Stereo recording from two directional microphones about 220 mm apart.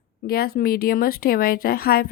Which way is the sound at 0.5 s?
45° left (ahead or behind).